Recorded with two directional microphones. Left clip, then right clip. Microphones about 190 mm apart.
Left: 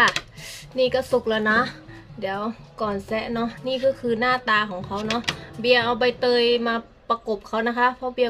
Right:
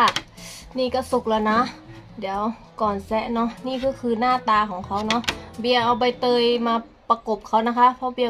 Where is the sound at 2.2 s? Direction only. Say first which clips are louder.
Right 2 dB; 10° left (ahead or behind).